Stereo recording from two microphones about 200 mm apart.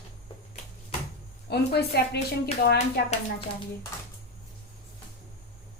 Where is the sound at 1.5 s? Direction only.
55° left (ahead or behind).